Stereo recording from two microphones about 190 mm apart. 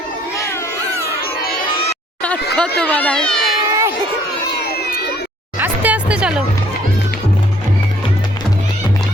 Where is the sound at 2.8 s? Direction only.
10° left (ahead or behind).